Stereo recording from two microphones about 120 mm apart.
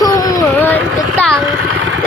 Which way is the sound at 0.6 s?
15° left (ahead or behind).